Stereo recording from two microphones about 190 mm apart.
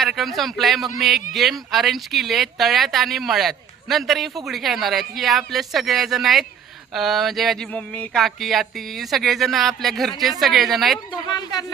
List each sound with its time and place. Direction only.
0.0 s speech: centre (ahead or behind)
11.1 s speech: 20° left (ahead or behind)